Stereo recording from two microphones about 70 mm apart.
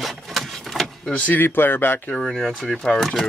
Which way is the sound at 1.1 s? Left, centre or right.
Left.